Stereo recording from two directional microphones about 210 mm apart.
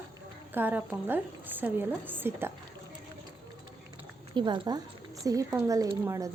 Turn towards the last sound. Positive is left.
turn(degrees=-15)  # may be behind; listen again after turning